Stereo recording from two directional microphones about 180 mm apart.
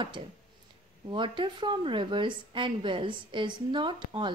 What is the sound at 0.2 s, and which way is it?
A woman's voice, 30° right (ahead or behind).